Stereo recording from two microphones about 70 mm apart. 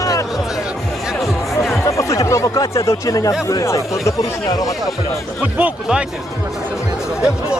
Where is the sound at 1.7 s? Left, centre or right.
Left.